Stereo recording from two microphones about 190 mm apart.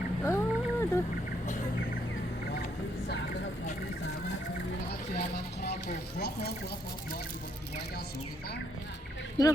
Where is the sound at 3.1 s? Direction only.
65° left (ahead or behind).